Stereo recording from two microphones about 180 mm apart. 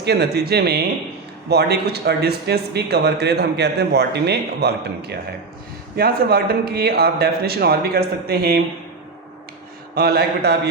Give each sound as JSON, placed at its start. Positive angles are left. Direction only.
{"t": 0.0, "sound": "a man's voice", "side_deg": -65}
{"t": 9.9, "sound": "a man's voice", "side_deg": -60}